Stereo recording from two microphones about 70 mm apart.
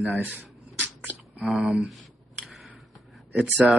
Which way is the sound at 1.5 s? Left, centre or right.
Centre.